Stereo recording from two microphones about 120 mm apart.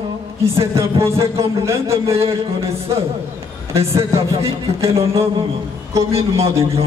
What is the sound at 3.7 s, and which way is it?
Speech, 55° right (ahead or behind).